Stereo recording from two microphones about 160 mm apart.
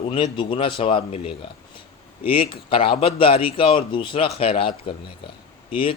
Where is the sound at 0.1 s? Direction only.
30° left (ahead or behind).